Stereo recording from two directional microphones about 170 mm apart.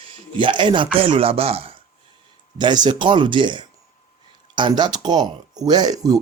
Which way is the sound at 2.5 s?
25° right (ahead or behind).